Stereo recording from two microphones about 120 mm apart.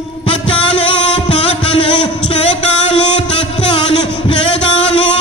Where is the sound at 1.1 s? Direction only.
55° left (ahead or behind).